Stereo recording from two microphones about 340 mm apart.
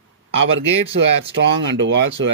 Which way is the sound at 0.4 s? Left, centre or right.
Right.